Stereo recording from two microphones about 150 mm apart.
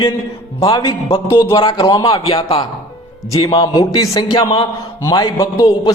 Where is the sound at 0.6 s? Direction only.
35° left (ahead or behind).